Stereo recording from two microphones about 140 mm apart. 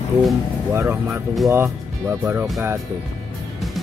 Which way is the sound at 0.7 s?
15° right (ahead or behind).